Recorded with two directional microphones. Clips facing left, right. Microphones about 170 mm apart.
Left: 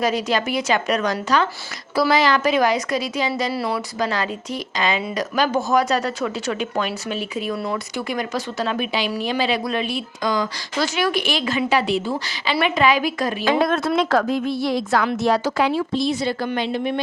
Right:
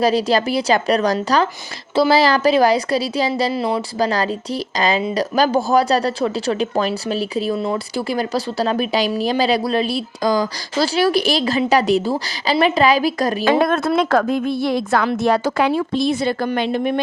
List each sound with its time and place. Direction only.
0.0 s speech: 35° right (ahead or behind)
3.5 s speech: 20° right (ahead or behind)
3.9 s a woman's voice: 35° right (ahead or behind); by 17.0 s 50° right (ahead or behind)